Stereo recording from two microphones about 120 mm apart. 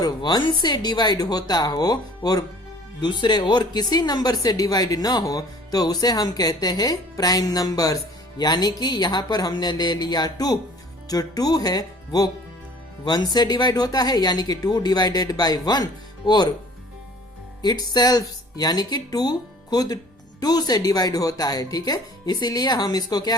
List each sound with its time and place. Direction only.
0.0 s speech: 35° left (ahead or behind)
17.6 s speech: 35° left (ahead or behind)